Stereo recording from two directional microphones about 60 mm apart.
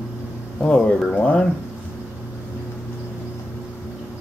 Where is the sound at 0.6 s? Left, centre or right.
Centre.